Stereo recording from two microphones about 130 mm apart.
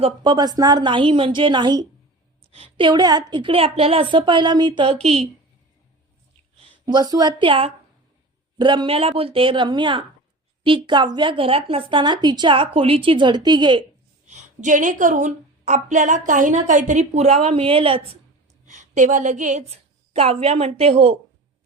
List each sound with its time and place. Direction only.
0.2 s a woman's voice: 35° right (ahead or behind)
2.5 s a woman's voice: 45° right (ahead or behind)
6.6 s a woman's voice: 40° right (ahead or behind)
14.3 s a woman's voice: 70° right (ahead or behind); by 18.2 s 45° right (ahead or behind)
18.6 s a woman's voice: 70° right (ahead or behind)
20.1 s a woman's voice: 50° right (ahead or behind)